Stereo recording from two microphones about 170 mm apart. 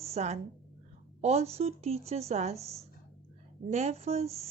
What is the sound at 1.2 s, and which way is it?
Speech, 40° right (ahead or behind).